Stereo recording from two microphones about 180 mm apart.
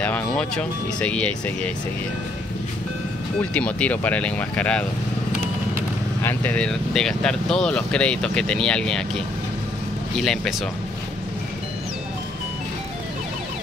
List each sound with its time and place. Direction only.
0.0 s speech: 5° left (ahead or behind)
3.3 s speech: 5° left (ahead or behind)
6.2 s speech: 10° left (ahead or behind)